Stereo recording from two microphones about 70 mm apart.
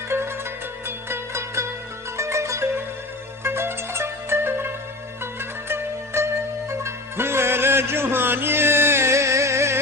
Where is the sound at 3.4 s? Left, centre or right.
Right.